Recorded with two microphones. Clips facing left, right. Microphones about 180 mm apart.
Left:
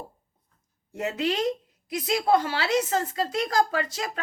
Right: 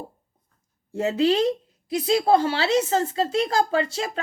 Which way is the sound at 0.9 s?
30° right (ahead or behind).